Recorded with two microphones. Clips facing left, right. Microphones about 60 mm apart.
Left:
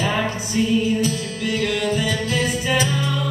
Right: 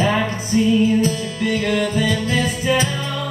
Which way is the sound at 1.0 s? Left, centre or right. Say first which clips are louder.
Right 3 dB; right.